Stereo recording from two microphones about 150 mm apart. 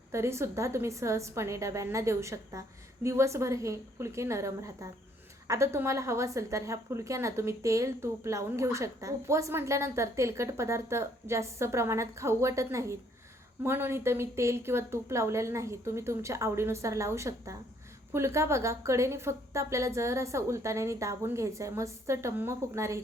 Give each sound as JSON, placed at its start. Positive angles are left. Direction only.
{"t": 0.1, "sound": "a woman's voice", "side_deg": -20}